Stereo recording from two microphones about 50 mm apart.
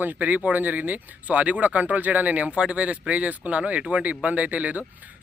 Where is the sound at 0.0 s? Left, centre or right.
Right.